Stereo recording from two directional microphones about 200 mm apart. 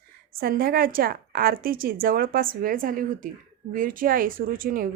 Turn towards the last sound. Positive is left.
turn(degrees=-45)  # may be behind; listen again after turning